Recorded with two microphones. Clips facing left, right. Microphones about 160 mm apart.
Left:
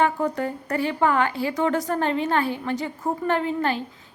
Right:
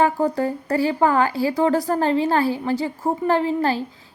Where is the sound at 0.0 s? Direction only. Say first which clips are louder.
Right 3 dB; 35° right (ahead or behind).